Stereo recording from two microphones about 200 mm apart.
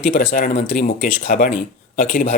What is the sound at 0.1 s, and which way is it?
Speech, 45° left (ahead or behind).